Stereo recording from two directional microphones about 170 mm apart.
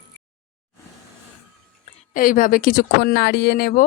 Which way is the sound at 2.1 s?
55° left (ahead or behind).